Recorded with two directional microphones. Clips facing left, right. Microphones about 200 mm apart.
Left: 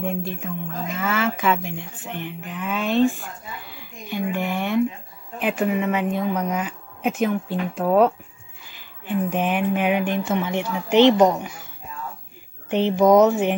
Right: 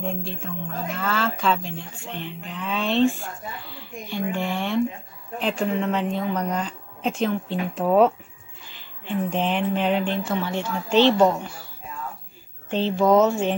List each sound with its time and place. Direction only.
0.0 s speech: 15° left (ahead or behind); by 8.1 s centre (ahead or behind)
9.0 s speech: 10° left (ahead or behind)
12.6 s speech: 15° left (ahead or behind)